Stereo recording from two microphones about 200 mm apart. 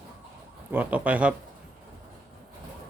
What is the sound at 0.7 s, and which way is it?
Speech, 5° right (ahead or behind).